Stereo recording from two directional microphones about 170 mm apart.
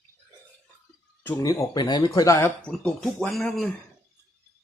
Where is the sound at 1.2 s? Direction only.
15° left (ahead or behind).